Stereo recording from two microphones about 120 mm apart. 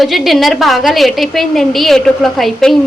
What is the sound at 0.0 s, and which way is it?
A woman's voice, centre (ahead or behind).